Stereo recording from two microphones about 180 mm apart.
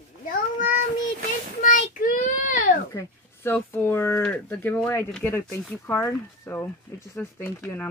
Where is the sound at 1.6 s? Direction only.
50° left (ahead or behind).